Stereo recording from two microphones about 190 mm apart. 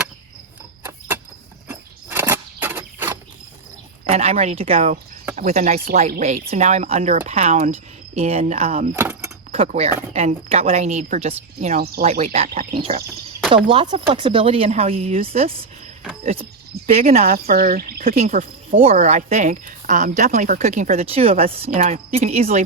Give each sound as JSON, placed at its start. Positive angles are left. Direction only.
{"t": 1.6, "sound": "a sound", "side_deg": -10}
{"t": 4.0, "sound": "a woman's voice", "side_deg": -30}
{"t": 9.0, "sound": "keys jangling", "side_deg": -15}
{"t": 9.5, "sound": "a woman's voice", "side_deg": -30}
{"t": 11.8, "sound": "speech", "side_deg": -55}
{"t": 12.2, "sound": "a woman's voice", "side_deg": -30}
{"t": 16.2, "sound": "cricket", "side_deg": -35}
{"t": 17.3, "sound": "speech", "side_deg": -50}
{"t": 18.1, "sound": "a woman's voice", "side_deg": -35}